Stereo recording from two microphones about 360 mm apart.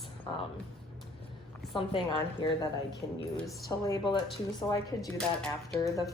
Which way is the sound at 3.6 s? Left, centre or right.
Centre.